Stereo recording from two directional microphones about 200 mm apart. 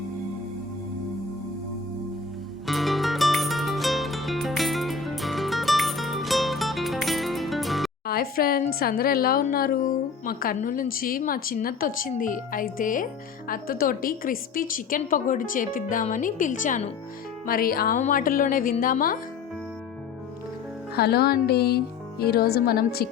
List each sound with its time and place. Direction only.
2.6 s music: centre (ahead or behind)
8.0 s a woman's voice: 50° left (ahead or behind)
20.9 s a woman's voice: 50° left (ahead or behind)